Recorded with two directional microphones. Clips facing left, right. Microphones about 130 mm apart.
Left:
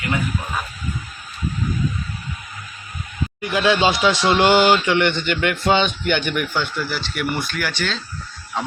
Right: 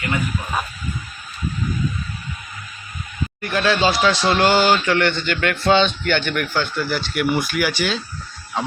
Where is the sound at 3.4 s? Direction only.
15° left (ahead or behind); by 8.0 s 10° right (ahead or behind).